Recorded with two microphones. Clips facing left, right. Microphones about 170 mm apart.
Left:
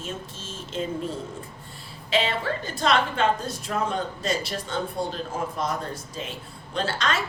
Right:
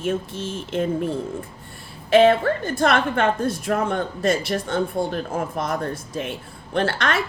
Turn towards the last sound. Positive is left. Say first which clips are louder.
# right 5 dB
turn(degrees=-60)  # may be behind; listen again after turning